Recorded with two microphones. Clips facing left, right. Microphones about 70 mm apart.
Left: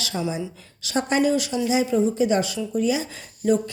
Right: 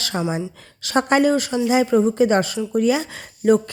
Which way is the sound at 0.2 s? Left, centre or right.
Right.